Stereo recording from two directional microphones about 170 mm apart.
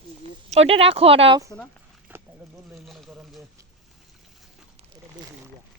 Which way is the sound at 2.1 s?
10° right (ahead or behind).